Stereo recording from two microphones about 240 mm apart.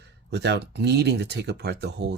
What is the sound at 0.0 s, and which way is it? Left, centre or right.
Speech, right.